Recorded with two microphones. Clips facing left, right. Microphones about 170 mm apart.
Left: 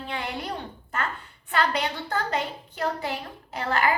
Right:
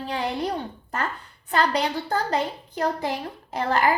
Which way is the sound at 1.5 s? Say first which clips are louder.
Right 3 dB; 35° right (ahead or behind).